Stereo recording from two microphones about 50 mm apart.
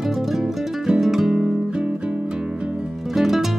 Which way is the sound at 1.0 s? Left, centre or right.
Centre.